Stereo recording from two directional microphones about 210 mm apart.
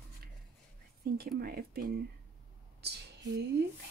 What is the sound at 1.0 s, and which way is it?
Speech, 45° right (ahead or behind).